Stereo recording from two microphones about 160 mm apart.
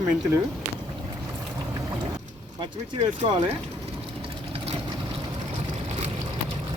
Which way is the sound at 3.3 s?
35° right (ahead or behind).